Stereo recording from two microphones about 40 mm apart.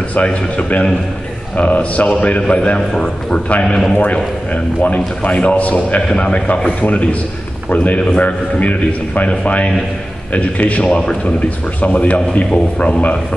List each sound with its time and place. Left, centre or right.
0.1 s a man's voice: left
3.6 s a man's voice: centre
4.0 s a man's voice: left
6.0 s a man's voice: left
10.3 s a man's voice: left